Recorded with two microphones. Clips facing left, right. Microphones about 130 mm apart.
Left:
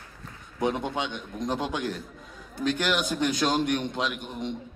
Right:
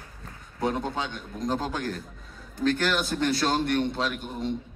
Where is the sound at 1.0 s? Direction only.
40° right (ahead or behind).